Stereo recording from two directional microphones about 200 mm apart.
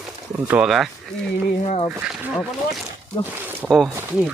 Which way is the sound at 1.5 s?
35° left (ahead or behind).